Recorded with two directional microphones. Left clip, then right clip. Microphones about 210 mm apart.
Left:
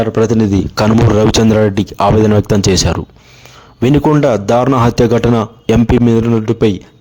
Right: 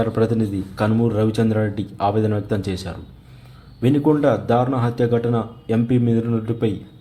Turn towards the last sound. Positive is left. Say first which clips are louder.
# left 10 dB
turn(degrees=45)  # may be behind; listen again after turning